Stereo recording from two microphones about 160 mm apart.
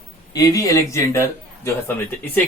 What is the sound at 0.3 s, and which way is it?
A man's voice, 20° left (ahead or behind).